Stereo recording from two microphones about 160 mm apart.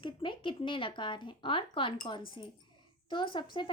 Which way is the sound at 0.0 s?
30° left (ahead or behind).